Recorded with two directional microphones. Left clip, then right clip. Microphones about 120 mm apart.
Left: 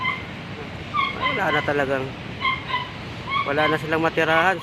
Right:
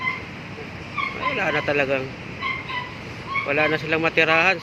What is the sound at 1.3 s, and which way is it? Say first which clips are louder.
Speech: right 1 dB; 30° right (ahead or behind).